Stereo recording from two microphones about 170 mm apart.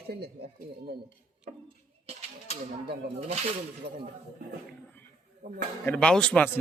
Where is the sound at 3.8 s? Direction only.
70° right (ahead or behind).